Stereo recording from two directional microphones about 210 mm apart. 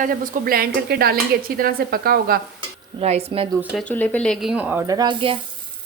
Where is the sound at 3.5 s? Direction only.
5° right (ahead or behind).